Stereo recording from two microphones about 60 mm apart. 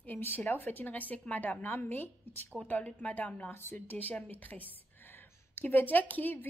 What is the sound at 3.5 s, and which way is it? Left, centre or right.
A woman's voice, left.